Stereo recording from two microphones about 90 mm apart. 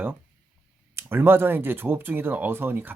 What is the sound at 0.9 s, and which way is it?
Speech, 25° right (ahead or behind).